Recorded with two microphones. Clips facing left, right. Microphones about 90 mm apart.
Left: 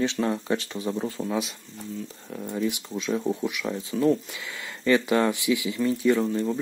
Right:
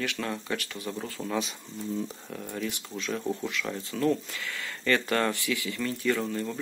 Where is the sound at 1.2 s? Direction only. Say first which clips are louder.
Left 3 dB; 10° left (ahead or behind).